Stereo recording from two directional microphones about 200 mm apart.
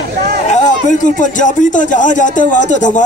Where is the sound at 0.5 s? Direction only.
40° left (ahead or behind).